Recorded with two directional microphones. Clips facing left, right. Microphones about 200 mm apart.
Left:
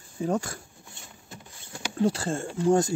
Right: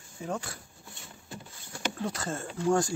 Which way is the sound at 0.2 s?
40° left (ahead or behind).